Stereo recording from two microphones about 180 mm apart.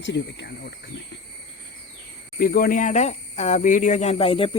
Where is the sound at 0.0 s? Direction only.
90° left.